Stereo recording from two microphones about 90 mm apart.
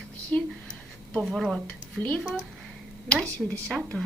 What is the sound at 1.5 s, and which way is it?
Speech, 15° left (ahead or behind).